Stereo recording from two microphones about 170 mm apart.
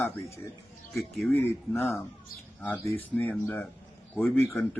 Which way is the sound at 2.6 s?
10° left (ahead or behind).